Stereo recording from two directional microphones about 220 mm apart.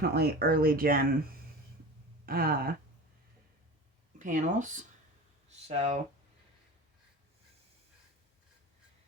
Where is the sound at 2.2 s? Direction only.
40° right (ahead or behind).